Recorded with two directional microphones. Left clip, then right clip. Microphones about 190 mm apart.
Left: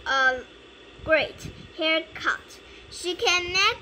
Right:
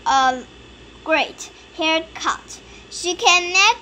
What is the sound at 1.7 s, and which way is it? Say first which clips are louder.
A child's voice: right 5 dB; 30° right (ahead or behind).